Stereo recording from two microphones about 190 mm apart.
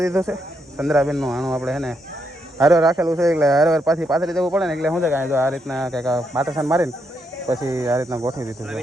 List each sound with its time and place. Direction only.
0.0 s speech: 15° right (ahead or behind)
0.8 s speech: centre (ahead or behind)
2.6 s speech: 15° right (ahead or behind)
3.4 s speech: centre (ahead or behind)
5.5 s speech: 5° left (ahead or behind)
7.6 s speech: 15° right (ahead or behind)